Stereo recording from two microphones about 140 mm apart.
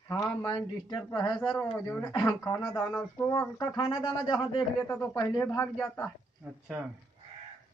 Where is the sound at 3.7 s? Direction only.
35° left (ahead or behind).